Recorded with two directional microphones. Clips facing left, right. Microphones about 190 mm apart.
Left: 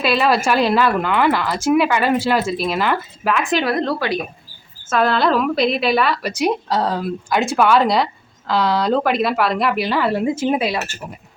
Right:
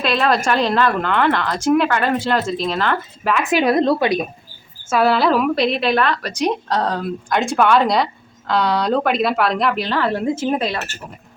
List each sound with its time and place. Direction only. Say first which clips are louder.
0.0 s speech: left 1 dB; 5° left (ahead or behind)
3.6 s a woman's voice: right 4 dB; 20° right (ahead or behind)
4.9 s a woman's voice: right 1 dB; 5° right (ahead or behind); by 10.9 s 10° left (ahead or behind)